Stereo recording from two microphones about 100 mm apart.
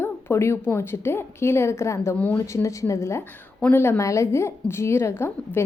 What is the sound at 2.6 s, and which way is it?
A woman's voice, 30° left (ahead or behind).